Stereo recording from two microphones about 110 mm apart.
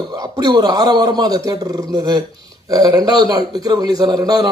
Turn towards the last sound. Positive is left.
turn(degrees=-35)  # may be behind; listen again after turning